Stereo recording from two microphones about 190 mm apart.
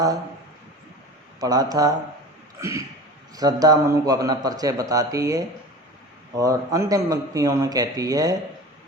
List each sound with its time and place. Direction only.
1.4 s a man's voice: 20° right (ahead or behind)
2.6 s throat clearing: 15° right (ahead or behind)
3.3 s a man's voice: 20° right (ahead or behind)